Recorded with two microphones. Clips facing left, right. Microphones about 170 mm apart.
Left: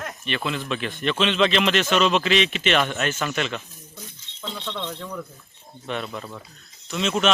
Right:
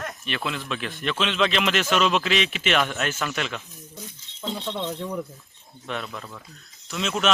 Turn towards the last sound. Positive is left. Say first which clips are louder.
# left 3 dB
turn(degrees=0)  # may be behind; listen again after turning